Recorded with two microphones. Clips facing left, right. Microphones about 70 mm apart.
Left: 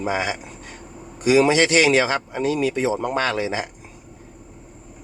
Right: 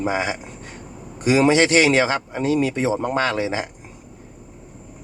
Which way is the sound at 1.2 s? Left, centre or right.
Right.